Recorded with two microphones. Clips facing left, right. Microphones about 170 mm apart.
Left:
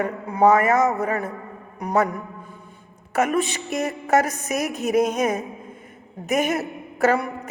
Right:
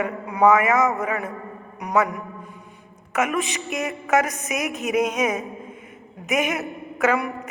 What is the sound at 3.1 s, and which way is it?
A woman's voice, 35° left (ahead or behind).